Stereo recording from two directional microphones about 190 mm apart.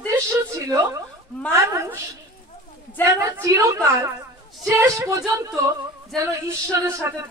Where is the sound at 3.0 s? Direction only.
15° right (ahead or behind).